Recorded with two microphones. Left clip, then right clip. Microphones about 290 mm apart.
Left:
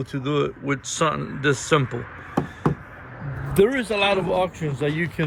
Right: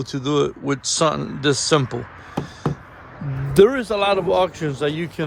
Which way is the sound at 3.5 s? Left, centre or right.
Right.